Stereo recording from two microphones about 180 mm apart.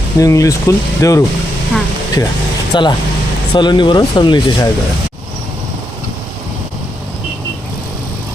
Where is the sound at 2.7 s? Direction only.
25° left (ahead or behind).